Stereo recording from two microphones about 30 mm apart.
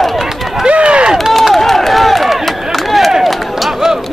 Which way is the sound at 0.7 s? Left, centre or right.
Right.